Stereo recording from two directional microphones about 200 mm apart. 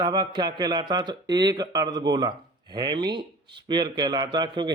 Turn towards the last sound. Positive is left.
turn(degrees=-20)  # may be behind; listen again after turning